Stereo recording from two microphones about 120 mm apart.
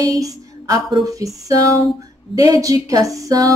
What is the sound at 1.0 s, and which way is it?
Speech, 30° right (ahead or behind).